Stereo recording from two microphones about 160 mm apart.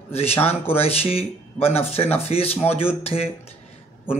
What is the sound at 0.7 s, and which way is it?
Speech, 40° left (ahead or behind).